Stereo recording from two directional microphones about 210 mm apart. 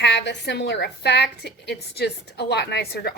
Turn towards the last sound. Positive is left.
turn(degrees=50)  # may be behind; listen again after turning